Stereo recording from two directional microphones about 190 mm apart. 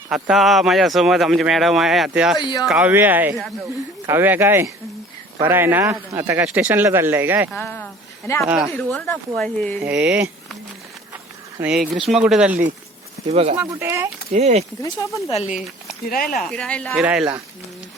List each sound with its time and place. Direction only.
0.1 s speech: centre (ahead or behind)
2.4 s speech: 20° left (ahead or behind)
2.6 s speech: 5° right (ahead or behind)
7.5 s speech: 10° left (ahead or behind)
11.1 s a sound: 10° right (ahead or behind)
12.0 s speech: centre (ahead or behind)
13.3 s speech: 30° right (ahead or behind)
13.6 s speech: 15° right (ahead or behind)
14.3 s speech: 35° right (ahead or behind)
14.8 s speech: 15° left (ahead or behind)
15.3 s speech: 35° left (ahead or behind)
16.0 s speech: 50° left (ahead or behind)
16.5 s speech: 5° left (ahead or behind)
17.0 s speech: 5° right (ahead or behind)